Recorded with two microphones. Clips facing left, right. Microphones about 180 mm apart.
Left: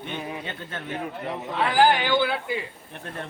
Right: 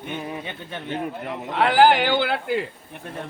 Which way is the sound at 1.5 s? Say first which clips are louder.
Right 4 dB; 65° right (ahead or behind).